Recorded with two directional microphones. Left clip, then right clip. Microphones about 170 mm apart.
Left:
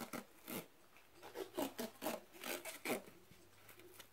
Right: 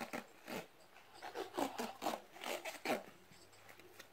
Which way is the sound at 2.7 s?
Centre (ahead or behind).